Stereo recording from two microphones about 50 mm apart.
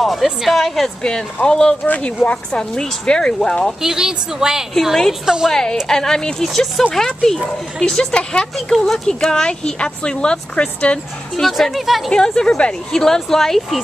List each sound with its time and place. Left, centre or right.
0.0 s a woman's voice: centre
1.0 s speech: centre
1.9 s speech: left; by 3.7 s centre
3.8 s a woman's voice: centre
5.5 s a woman's voice: centre
6.9 s speech: centre
8.5 s speech: centre
11.4 s a woman's voice: centre
12.1 s speech: centre